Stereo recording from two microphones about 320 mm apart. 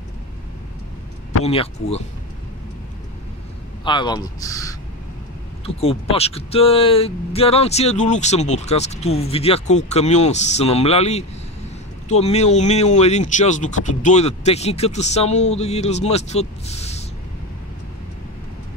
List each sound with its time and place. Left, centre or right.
1.4 s speech: centre
3.8 s a man's voice: centre
5.8 s speech: centre